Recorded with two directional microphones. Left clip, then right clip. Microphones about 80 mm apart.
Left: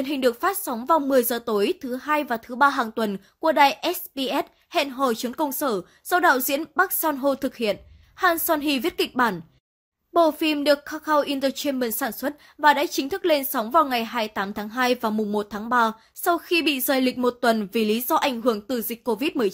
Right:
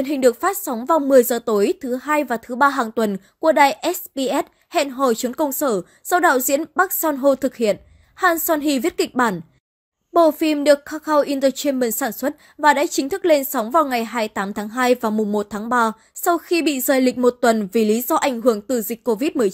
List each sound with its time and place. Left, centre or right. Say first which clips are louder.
0.0 s a woman's voice: right 5 dB; right
1.1 s a woman's voice: right 7 dB; right
15.3 s a woman's voice: right 1 dB; right